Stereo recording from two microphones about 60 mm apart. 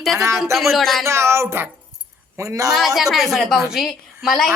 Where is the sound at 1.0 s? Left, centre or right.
Right.